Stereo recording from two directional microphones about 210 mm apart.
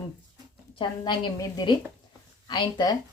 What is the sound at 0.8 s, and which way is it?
Speech, 20° left (ahead or behind).